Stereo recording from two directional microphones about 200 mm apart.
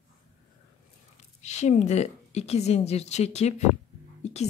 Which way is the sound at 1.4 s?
35° left (ahead or behind).